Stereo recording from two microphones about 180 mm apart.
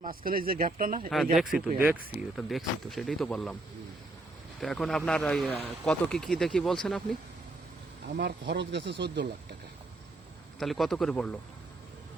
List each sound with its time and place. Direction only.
0.0 s speech: 55° right (ahead or behind)
1.1 s a man's voice: centre (ahead or behind)
1.5 s speech: 10° right (ahead or behind)
2.3 s a man's voice: centre (ahead or behind)
4.6 s a man's voice: 5° left (ahead or behind)
8.0 s speech: 65° right (ahead or behind)
10.6 s a man's voice: centre (ahead or behind)